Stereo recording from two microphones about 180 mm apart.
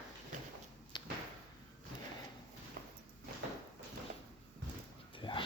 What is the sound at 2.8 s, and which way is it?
Walk, 55° right (ahead or behind).